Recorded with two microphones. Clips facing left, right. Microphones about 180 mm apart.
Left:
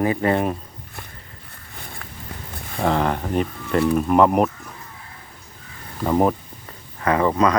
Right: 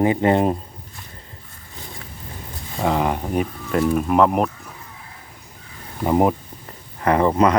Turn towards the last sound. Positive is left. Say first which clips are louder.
# right 2 dB
turn(degrees=-30)  # may be behind; listen again after turning